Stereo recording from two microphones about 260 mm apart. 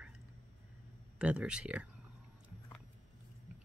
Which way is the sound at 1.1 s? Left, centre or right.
Centre.